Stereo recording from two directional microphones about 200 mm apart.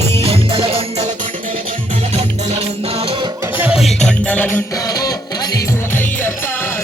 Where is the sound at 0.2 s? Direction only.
30° right (ahead or behind).